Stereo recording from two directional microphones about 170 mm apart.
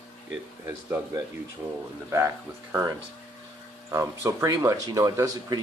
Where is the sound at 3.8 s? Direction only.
15° right (ahead or behind).